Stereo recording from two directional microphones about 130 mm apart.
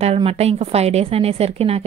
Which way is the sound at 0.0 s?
50° right (ahead or behind).